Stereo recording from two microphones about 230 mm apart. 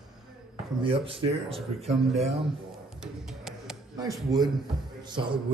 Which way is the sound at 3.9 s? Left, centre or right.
Centre.